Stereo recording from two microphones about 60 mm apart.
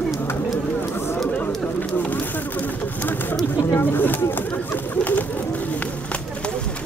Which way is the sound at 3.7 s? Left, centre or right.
Left.